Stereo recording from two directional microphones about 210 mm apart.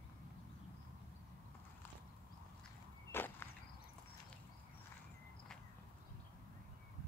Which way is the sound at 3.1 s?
10° left (ahead or behind).